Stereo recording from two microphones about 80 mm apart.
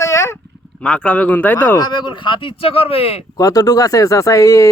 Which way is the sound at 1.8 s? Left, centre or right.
Left.